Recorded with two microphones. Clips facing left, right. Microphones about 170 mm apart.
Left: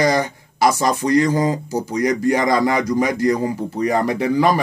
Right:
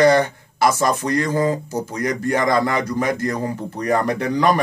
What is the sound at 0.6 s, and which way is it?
Speech, 55° right (ahead or behind).